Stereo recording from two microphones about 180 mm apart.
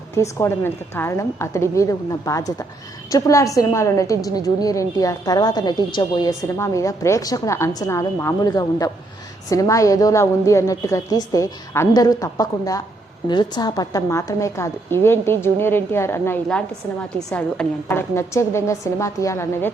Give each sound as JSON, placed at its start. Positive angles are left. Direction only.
{"t": 0.1, "sound": "a woman's voice", "side_deg": 15}